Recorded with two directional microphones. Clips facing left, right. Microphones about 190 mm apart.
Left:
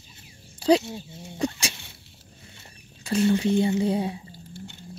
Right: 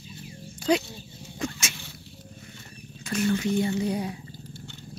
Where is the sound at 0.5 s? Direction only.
30° left (ahead or behind).